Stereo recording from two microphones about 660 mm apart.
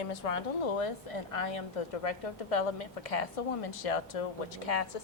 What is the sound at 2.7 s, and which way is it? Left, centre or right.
Speech, left.